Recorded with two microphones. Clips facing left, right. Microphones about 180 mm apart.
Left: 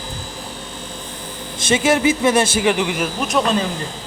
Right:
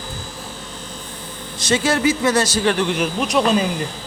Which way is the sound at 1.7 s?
20° left (ahead or behind).